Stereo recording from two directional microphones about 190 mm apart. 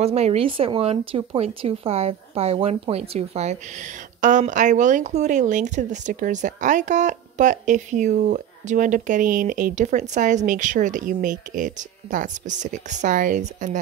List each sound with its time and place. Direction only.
0.0 s speech: 35° right (ahead or behind)